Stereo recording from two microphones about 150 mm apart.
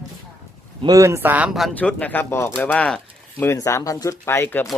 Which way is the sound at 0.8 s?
20° right (ahead or behind).